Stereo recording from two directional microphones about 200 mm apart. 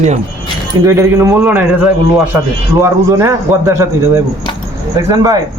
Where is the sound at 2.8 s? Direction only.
10° right (ahead or behind).